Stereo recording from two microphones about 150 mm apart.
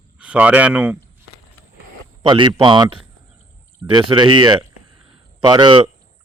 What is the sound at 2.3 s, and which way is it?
A man's voice, 30° right (ahead or behind).